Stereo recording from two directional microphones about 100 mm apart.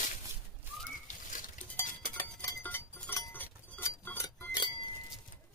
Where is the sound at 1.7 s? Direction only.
20° left (ahead or behind).